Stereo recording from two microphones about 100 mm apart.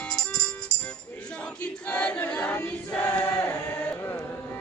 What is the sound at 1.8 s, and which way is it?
Choir, 10° left (ahead or behind).